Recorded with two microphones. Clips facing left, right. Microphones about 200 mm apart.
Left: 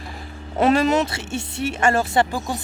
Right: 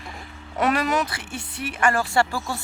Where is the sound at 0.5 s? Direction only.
25° left (ahead or behind).